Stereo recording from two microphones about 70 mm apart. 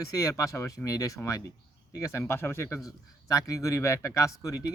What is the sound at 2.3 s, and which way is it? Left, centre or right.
Speech, left.